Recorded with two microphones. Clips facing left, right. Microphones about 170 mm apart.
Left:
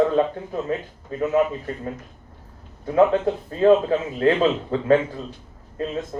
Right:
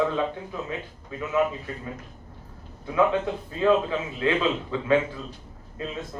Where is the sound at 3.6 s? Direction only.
45° left (ahead or behind).